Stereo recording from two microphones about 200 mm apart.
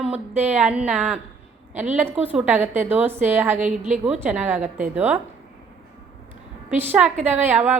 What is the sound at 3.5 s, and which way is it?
Speech, 35° right (ahead or behind).